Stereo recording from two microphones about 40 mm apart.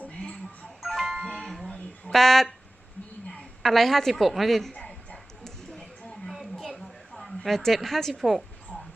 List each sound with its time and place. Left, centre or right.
0.2 s music: centre
0.9 s music: centre
2.1 s speech: centre
3.6 s a woman's voice: centre
4.7 s a sound: left
6.2 s a sound: centre
8.2 s a woman's voice: centre